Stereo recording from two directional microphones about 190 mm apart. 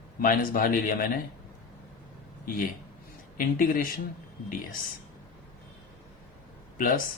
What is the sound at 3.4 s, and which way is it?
Speech, 45° left (ahead or behind).